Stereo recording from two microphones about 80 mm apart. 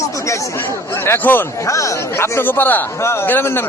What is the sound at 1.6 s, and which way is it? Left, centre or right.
A man's voice, left.